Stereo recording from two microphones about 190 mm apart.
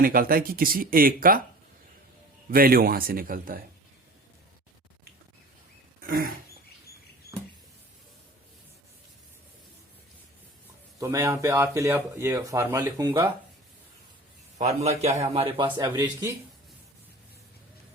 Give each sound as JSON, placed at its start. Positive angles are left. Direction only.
{"t": 0.0, "sound": "speech", "side_deg": -50}
{"t": 2.5, "sound": "speech", "side_deg": -50}
{"t": 6.0, "sound": "a sound", "side_deg": -50}
{"t": 11.0, "sound": "speech", "side_deg": -15}
{"t": 14.6, "sound": "a man's voice", "side_deg": -35}